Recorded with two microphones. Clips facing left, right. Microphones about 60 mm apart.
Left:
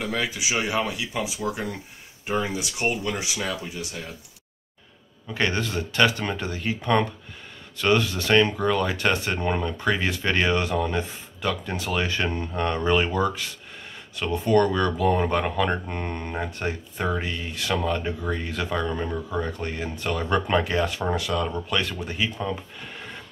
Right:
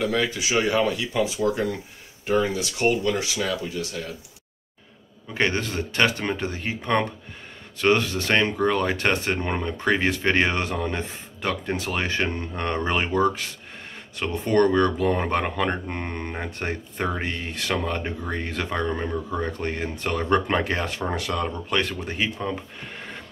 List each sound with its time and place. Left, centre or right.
0.0 s speech: centre
5.3 s speech: right
16.0 s speech: right
16.3 s speech: right
22.8 s a sound: right